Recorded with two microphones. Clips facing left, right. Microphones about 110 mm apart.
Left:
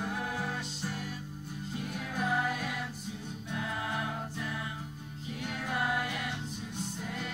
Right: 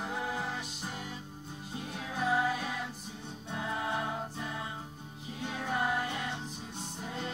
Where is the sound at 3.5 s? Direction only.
20° right (ahead or behind).